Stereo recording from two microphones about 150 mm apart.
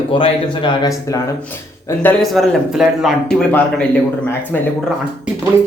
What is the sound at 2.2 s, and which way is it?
Speech, centre (ahead or behind).